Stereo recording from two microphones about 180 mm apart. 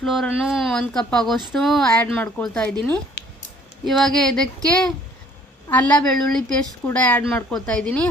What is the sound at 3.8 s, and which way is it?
A woman's voice, 5° left (ahead or behind).